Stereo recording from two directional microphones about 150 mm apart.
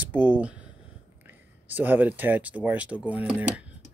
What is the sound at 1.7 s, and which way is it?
Speech, 10° right (ahead or behind).